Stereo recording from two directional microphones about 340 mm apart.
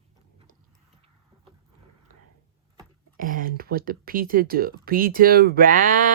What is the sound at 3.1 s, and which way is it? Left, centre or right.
Speech, right.